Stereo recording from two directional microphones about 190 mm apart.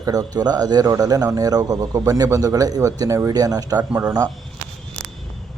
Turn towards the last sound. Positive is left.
turn(degrees=-20)  # may be behind; listen again after turning